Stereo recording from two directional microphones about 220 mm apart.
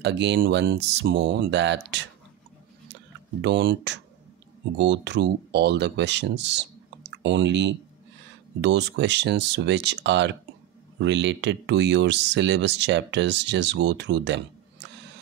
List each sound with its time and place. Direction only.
0.0 s speech: 50° right (ahead or behind)
3.4 s speech: 50° right (ahead or behind)